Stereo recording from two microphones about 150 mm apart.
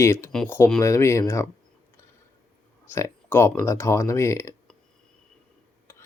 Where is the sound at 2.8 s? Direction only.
15° left (ahead or behind).